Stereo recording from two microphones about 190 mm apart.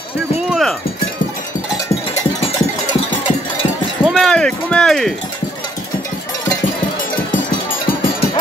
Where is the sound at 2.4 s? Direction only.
30° left (ahead or behind).